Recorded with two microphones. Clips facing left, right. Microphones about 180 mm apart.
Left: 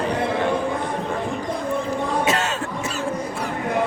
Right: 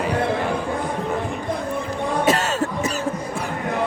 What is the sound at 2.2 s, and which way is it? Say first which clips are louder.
Cough: right 3 dB; 40° right (ahead or behind).